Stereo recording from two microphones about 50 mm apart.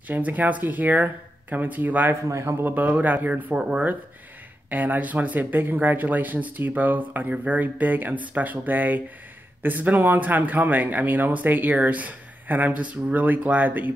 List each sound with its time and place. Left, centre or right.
0.1 s speech: right
2.2 s a man's voice: right
2.6 s speech: right
3.5 s speech: centre
4.6 s speech: right